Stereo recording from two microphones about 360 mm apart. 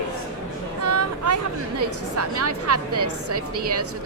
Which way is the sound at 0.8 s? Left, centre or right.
Right.